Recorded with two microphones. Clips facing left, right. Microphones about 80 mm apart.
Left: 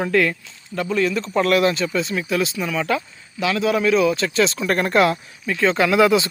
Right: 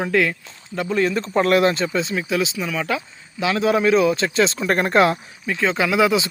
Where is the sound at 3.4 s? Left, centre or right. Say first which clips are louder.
Right 1 dB; right.